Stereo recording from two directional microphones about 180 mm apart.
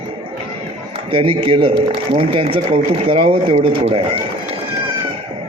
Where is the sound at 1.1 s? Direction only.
30° right (ahead or behind).